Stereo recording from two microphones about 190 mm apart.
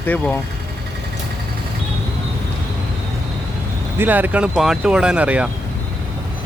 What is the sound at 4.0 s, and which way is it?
Speech, 10° right (ahead or behind).